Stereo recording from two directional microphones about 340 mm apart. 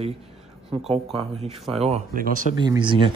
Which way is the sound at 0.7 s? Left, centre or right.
Centre.